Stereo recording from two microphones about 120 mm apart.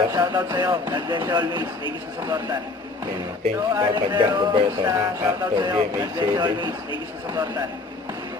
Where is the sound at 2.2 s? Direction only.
30° right (ahead or behind).